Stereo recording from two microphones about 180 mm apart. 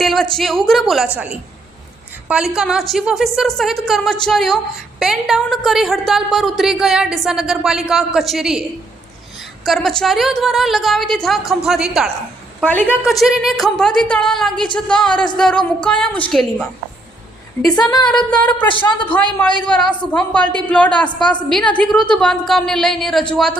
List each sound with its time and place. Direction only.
0.0 s a woman's voice: centre (ahead or behind)
9.6 s a woman's voice: centre (ahead or behind)
12.6 s a woman's voice: 10° left (ahead or behind)
17.7 s speech: 20° left (ahead or behind)
18.3 s a man's voice: 5° left (ahead or behind)
21.1 s speech: 25° left (ahead or behind)
21.3 s a woman's voice: 5° left (ahead or behind)